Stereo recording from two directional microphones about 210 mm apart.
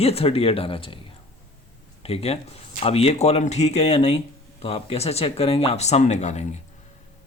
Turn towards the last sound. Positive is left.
turn(degrees=35)  # may be behind; listen again after turning